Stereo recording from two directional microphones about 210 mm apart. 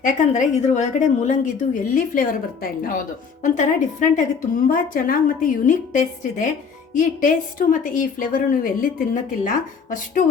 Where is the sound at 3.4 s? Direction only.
35° left (ahead or behind).